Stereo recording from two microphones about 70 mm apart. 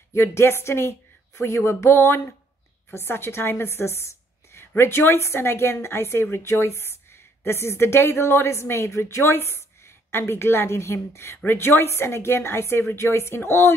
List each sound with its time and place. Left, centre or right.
0.1 s a woman's voice: left